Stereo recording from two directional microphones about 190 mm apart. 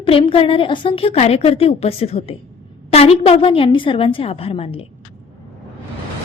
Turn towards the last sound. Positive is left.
turn(degrees=30)  # may be behind; listen again after turning